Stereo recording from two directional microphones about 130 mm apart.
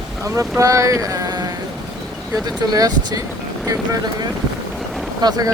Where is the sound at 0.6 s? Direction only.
25° right (ahead or behind).